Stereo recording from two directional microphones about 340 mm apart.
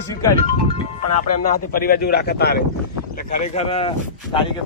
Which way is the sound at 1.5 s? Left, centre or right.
Left.